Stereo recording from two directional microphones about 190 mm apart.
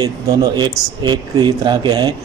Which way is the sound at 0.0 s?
20° right (ahead or behind).